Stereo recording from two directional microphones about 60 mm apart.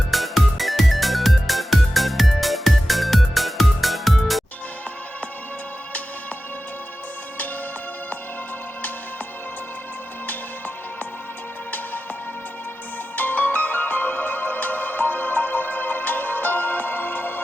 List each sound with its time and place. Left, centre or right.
0.1 s music: centre
13.1 s music: left